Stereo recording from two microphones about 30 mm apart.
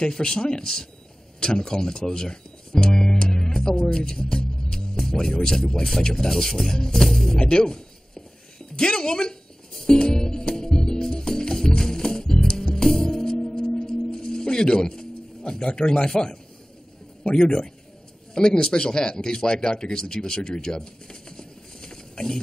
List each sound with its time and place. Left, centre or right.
0.0 s speech: left
1.4 s music: left
5.9 s speech: centre
6.9 s music: centre
7.3 s speech: left
9.8 s music: left
18.3 s speech: left